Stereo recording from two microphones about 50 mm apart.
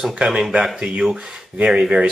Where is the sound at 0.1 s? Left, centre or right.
Centre.